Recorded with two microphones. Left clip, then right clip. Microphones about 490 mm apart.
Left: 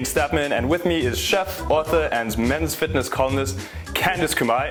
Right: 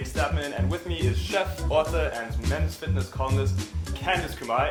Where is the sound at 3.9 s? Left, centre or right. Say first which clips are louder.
Left 10 dB; left.